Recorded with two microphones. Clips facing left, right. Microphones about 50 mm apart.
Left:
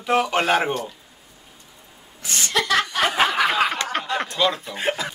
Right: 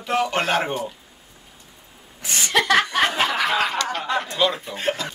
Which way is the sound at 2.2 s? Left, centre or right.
Right.